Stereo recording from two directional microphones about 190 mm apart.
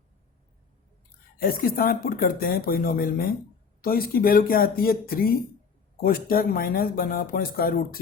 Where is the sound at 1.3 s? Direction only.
50° left (ahead or behind).